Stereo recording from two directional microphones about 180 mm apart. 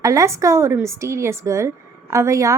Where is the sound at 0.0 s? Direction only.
20° right (ahead or behind).